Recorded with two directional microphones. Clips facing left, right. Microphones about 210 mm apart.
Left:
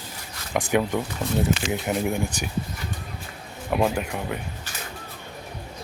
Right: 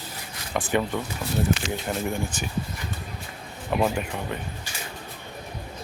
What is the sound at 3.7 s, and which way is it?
Speech, 5° left (ahead or behind).